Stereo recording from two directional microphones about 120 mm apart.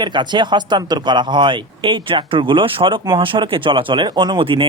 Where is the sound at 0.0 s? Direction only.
40° right (ahead or behind).